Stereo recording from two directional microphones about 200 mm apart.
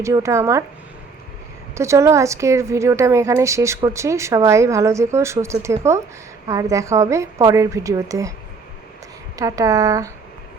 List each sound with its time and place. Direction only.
0.0 s a woman's voice: 15° right (ahead or behind)
1.7 s a woman's voice: 15° right (ahead or behind)
9.4 s a woman's voice: 15° right (ahead or behind)